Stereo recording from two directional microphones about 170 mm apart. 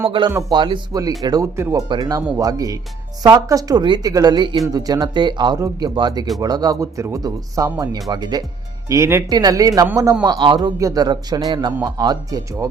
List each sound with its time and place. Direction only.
0.1 s a man's voice: 25° right (ahead or behind)